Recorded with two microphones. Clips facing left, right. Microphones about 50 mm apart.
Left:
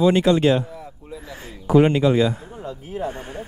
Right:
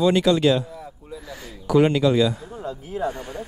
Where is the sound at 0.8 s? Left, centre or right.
Centre.